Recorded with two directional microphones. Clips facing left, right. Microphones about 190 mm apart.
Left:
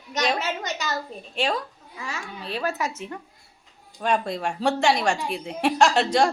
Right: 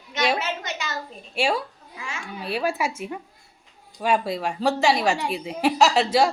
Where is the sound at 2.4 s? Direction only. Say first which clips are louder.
Right 3 dB; 10° right (ahead or behind).